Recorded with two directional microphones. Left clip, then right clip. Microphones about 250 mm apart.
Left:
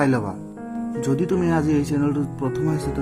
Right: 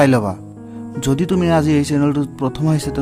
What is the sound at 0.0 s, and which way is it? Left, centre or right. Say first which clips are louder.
Speech: right 7 dB; right.